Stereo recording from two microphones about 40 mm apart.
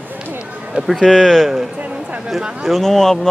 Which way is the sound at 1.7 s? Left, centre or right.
Right.